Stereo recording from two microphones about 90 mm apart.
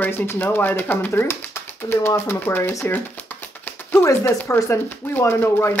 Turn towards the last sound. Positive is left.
turn(degrees=25)  # may be behind; listen again after turning